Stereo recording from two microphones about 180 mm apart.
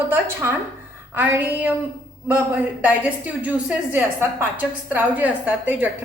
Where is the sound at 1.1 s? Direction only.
10° right (ahead or behind).